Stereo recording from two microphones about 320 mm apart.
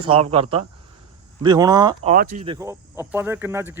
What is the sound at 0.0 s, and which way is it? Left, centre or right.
Speech, centre.